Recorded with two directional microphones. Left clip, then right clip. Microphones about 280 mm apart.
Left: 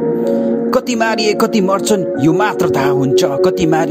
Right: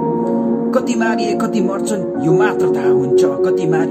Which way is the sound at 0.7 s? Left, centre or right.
Left.